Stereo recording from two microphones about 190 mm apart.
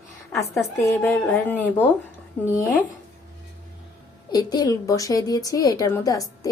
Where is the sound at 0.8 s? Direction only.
10° left (ahead or behind).